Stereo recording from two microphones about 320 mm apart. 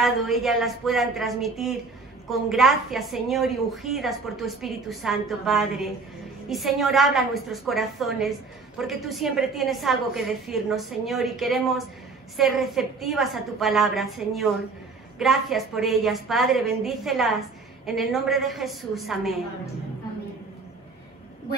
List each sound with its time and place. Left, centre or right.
0.0 s a woman's voice: centre